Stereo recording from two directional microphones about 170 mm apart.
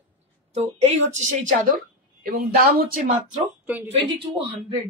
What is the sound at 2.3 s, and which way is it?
Speech, 60° right (ahead or behind).